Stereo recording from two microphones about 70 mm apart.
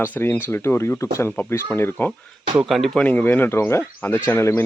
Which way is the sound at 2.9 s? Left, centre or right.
Left.